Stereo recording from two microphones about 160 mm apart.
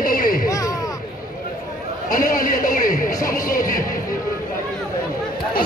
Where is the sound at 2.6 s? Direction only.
60° left (ahead or behind).